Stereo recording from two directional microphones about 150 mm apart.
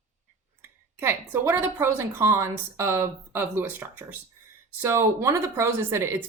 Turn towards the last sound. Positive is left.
turn(degrees=-15)  # may be behind; listen again after turning